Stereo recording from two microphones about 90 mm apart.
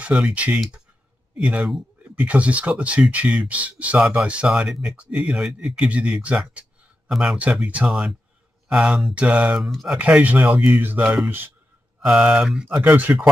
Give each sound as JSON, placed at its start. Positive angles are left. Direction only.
{"t": 0.1, "sound": "speech", "side_deg": -10}
{"t": 9.6, "sound": "speech", "side_deg": 0}
{"t": 9.9, "sound": "speech", "side_deg": -15}
{"t": 12.0, "sound": "speech", "side_deg": -10}